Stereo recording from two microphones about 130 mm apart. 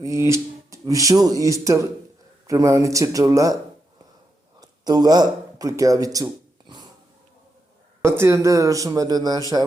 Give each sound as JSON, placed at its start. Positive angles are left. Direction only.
{"t": 0.0, "sound": "speech", "side_deg": -20}
{"t": 4.6, "sound": "speech", "side_deg": -30}
{"t": 8.0, "sound": "speech", "side_deg": -20}